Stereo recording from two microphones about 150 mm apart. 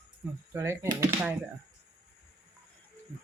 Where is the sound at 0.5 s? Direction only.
15° right (ahead or behind).